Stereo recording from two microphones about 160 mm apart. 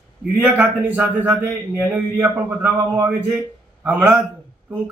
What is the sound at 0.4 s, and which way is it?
A man's voice, 10° right (ahead or behind).